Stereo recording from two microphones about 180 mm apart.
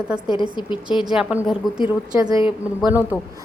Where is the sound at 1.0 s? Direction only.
5° right (ahead or behind).